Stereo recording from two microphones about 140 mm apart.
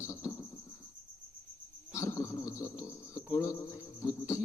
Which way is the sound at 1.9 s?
20° left (ahead or behind).